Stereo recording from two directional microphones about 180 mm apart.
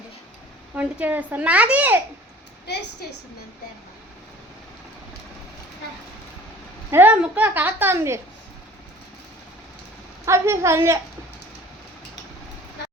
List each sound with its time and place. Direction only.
0.8 s a woman's voice: 10° right (ahead or behind)
2.7 s a woman's voice: 65° left (ahead or behind)
6.9 s a woman's voice: 10° right (ahead or behind)
10.2 s a woman's voice: 15° right (ahead or behind)